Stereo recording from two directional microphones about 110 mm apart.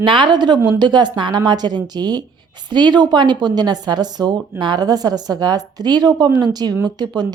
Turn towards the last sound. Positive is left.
turn(degrees=-40)  # may be behind; listen again after turning